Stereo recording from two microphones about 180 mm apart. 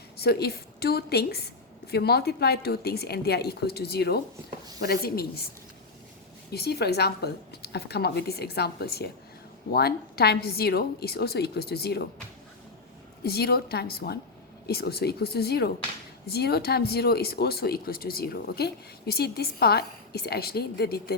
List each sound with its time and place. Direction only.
0.2 s speech: 65° left (ahead or behind)
6.5 s speech: 65° left (ahead or behind)
13.2 s speech: 60° left (ahead or behind)